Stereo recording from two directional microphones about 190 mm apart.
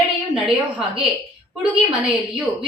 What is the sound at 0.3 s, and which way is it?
Speech, 5° right (ahead or behind).